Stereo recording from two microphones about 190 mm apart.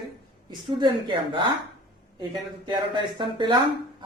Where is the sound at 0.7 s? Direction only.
25° right (ahead or behind).